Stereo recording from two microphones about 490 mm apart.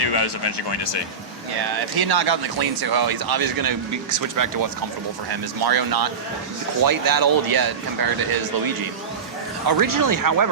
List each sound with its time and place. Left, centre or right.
0.0 s speech: left
1.5 s speech: right